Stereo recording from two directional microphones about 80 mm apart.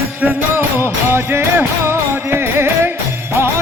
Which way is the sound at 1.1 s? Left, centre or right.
Right.